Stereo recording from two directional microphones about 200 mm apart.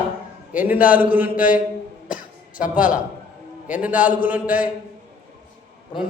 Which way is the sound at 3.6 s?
5° right (ahead or behind).